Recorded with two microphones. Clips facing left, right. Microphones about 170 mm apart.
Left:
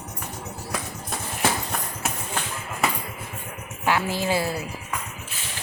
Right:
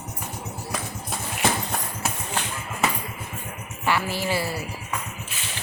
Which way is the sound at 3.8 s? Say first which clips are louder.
Left 1 dB; 15° left (ahead or behind).